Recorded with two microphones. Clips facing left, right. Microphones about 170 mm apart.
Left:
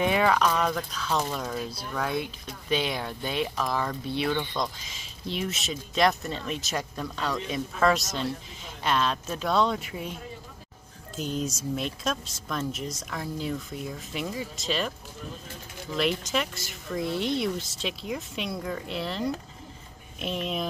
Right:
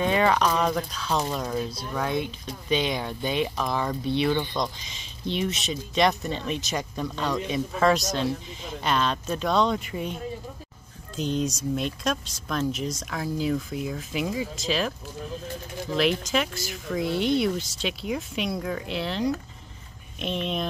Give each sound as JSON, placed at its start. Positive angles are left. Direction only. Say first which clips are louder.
{"t": 0.0, "sound": "speech", "louder": "right 1 dB", "side_deg": 5}
{"t": 0.5, "sound": "speech", "louder": "right 2 dB", "side_deg": -10}
{"t": 0.9, "sound": "speech", "louder": "right 2 dB", "side_deg": 0}
{"t": 11.1, "sound": "speech", "louder": "right 4 dB", "side_deg": 5}
{"t": 16.0, "sound": "speech", "louder": "right 3 dB", "side_deg": 0}